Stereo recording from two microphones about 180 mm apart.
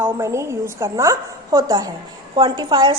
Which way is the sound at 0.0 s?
15° right (ahead or behind).